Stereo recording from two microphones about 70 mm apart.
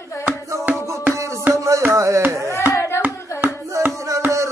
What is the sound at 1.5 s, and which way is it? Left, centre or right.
Music, right.